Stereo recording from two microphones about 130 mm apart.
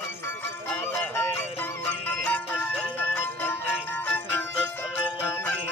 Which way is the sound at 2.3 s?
15° left (ahead or behind).